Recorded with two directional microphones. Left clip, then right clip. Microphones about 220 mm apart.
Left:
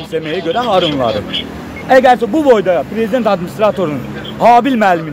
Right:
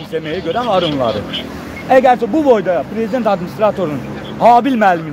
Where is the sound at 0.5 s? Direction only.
10° left (ahead or behind).